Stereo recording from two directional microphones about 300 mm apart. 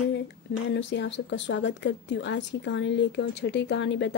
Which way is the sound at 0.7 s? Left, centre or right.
Left.